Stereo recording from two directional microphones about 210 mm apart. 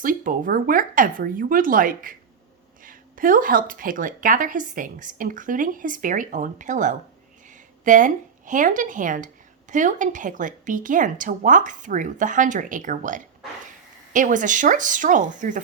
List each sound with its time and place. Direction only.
0.0 s speech: 40° right (ahead or behind)